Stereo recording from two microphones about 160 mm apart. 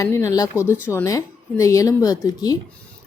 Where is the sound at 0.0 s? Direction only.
20° left (ahead or behind).